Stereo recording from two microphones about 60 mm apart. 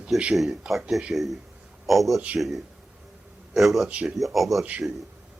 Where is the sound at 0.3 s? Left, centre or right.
Centre.